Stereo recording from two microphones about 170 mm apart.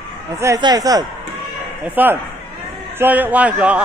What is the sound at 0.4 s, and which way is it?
Speech, 20° right (ahead or behind).